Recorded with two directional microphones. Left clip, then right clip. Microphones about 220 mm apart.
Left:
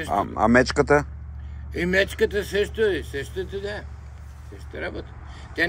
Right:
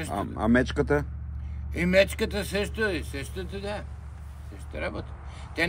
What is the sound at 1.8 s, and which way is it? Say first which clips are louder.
Speech: left 1 dB; 10° left (ahead or behind).